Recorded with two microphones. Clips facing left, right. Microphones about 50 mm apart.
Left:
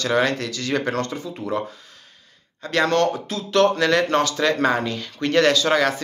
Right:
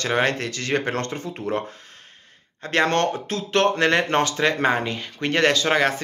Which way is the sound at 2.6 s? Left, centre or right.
Right.